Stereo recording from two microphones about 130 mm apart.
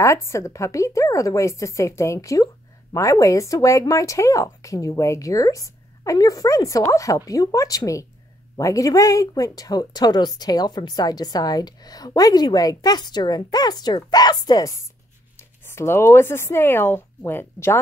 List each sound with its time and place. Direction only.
0.0 s speech: 20° left (ahead or behind)